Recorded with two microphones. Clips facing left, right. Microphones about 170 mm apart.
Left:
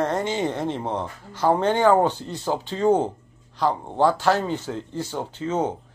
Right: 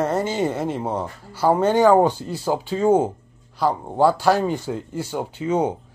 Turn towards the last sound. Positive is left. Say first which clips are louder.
# right 3 dB
turn(degrees=-10)  # may be behind; listen again after turning